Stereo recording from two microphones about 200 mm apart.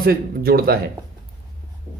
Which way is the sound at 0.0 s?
50° right (ahead or behind).